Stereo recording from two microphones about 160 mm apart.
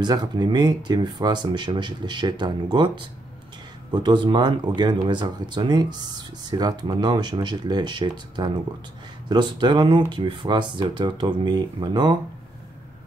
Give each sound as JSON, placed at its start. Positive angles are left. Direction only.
{"t": 0.0, "sound": "speech", "side_deg": -25}